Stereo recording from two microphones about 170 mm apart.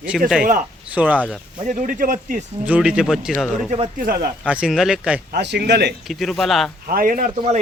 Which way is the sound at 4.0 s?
60° right (ahead or behind).